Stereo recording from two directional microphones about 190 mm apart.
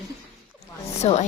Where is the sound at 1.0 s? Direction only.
35° left (ahead or behind).